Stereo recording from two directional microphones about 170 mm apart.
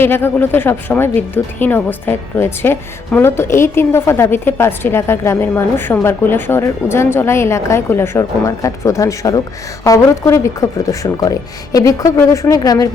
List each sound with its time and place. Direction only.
0.0 s a woman's voice: 15° left (ahead or behind)